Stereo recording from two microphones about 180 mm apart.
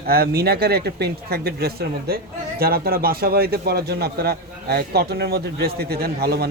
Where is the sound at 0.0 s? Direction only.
55° right (ahead or behind).